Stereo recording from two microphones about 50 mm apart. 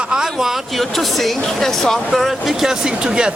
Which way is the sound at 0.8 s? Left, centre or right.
Centre.